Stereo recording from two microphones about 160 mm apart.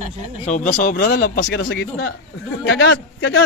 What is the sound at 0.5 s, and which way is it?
A man's voice, 50° left (ahead or behind).